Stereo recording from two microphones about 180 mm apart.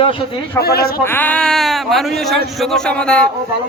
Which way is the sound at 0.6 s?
60° left (ahead or behind).